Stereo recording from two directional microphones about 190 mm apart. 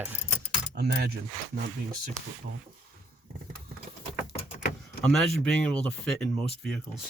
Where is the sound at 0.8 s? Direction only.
60° right (ahead or behind).